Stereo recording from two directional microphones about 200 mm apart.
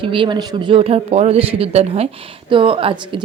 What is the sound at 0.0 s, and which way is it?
A woman's voice, 25° right (ahead or behind).